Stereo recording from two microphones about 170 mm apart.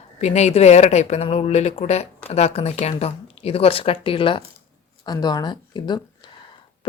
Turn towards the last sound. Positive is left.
turn(degrees=25)  # may be behind; listen again after turning